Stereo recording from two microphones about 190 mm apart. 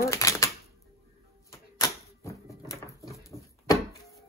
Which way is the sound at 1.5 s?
15° left (ahead or behind).